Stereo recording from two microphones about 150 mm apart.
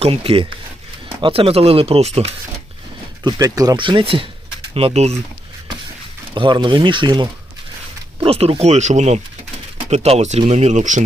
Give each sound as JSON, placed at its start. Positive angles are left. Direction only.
{"t": 0.0, "sound": "speech", "side_deg": -40}
{"t": 3.2, "sound": "speech", "side_deg": -25}
{"t": 6.3, "sound": "speech", "side_deg": -35}